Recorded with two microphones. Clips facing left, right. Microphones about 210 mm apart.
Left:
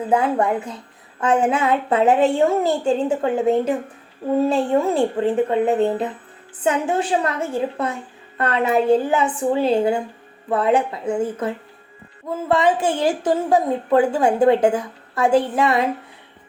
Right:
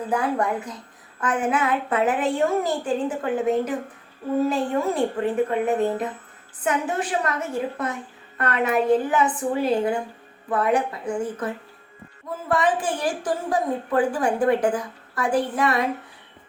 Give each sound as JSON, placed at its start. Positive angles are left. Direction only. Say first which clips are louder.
{"t": 0.1, "sound": "a woman's voice", "louder": "left 5 dB", "side_deg": 25}